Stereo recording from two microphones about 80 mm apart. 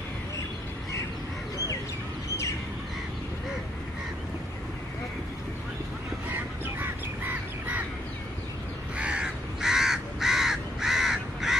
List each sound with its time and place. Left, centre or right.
6.6 s bird: right
8.9 s crow: centre